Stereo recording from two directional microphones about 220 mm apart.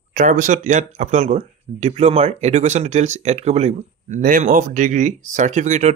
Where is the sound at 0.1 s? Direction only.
35° right (ahead or behind).